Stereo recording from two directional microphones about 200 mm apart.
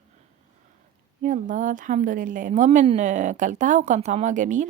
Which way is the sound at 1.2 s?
40° right (ahead or behind).